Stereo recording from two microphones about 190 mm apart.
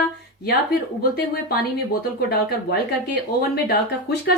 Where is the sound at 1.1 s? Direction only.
55° left (ahead or behind).